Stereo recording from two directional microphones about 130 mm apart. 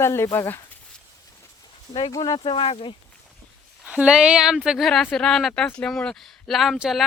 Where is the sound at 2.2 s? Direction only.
40° left (ahead or behind).